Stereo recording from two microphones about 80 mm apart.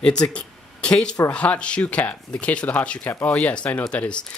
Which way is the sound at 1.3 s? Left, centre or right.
Centre.